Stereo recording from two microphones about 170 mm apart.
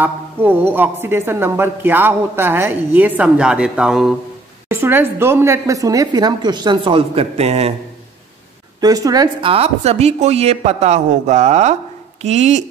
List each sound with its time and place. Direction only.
0.0 s a woman's voice: 10° right (ahead or behind); by 7.7 s 35° right (ahead or behind)
8.8 s a woman's voice: 20° right (ahead or behind); by 12.6 s 40° right (ahead or behind)